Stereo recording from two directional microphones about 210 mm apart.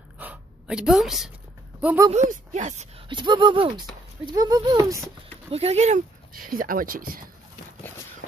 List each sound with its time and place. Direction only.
0.2 s a sound: 5° right (ahead or behind)
1.8 s speech: 5° right (ahead or behind)
2.5 s speech: 35° right (ahead or behind); by 5.0 s 15° right (ahead or behind)
5.5 s speech: 30° right (ahead or behind)